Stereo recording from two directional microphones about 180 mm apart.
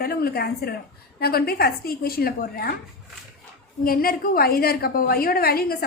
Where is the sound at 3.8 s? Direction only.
55° left (ahead or behind).